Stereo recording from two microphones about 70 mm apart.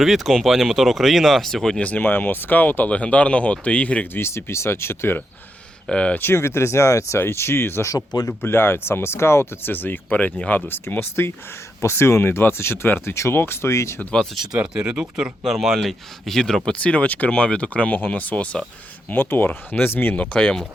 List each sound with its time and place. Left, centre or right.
0.0 s speech: centre
1.8 s speech: left
4.1 s speech: left
5.9 s speech: centre
6.1 s speech: left
7.9 s speech: left
8.3 s speech: left
10.7 s speech: left
14.3 s speech: centre
15.4 s speech: centre; by 18.6 s left
19.1 s speech: left
20.1 s speech: centre